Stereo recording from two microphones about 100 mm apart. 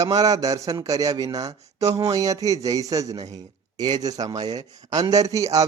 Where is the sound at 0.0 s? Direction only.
35° right (ahead or behind).